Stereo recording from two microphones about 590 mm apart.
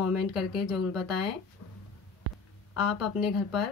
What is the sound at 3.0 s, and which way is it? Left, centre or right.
Speech, centre.